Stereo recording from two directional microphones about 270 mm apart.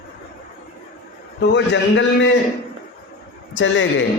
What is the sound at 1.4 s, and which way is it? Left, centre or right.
Speech, left.